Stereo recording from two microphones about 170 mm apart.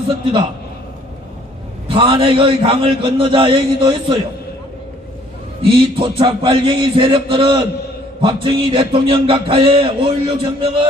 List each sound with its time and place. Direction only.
1.9 s music: 30° right (ahead or behind)
5.6 s a man's voice: 30° right (ahead or behind)
8.2 s music: 30° right (ahead or behind)